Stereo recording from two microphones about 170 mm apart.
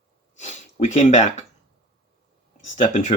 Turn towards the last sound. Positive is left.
turn(degrees=45)  # may be behind; listen again after turning